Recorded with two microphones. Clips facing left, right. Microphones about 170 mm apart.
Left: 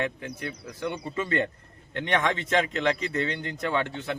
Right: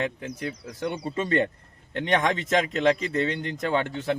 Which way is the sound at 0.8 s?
40° right (ahead or behind).